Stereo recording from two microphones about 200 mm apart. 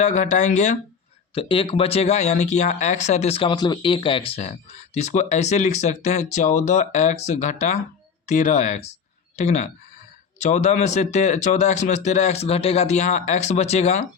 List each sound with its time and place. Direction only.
0.0 s speech: 35° left (ahead or behind)
1.4 s speech: 25° left (ahead or behind)